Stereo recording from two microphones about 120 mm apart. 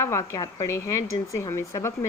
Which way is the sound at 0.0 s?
25° left (ahead or behind).